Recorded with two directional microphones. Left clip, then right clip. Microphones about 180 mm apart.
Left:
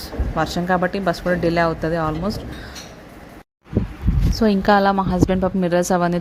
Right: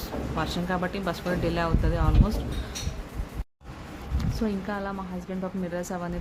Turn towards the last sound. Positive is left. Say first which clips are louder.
# left 14 dB
turn(degrees=50)  # may be behind; listen again after turning